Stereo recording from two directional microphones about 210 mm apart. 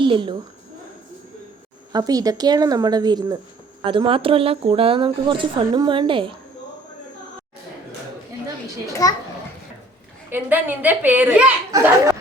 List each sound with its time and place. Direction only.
0.0 s a woman's voice: 20° right (ahead or behind)
1.9 s speech: 20° right (ahead or behind)
9.0 s a child's voice: 15° left (ahead or behind)
10.2 s speech: 10° right (ahead or behind)